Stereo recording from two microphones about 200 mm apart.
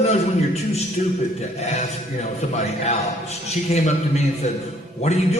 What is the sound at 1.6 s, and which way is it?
A man's voice, 35° left (ahead or behind).